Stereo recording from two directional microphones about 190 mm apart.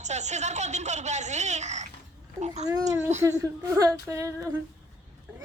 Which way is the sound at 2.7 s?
20° right (ahead or behind).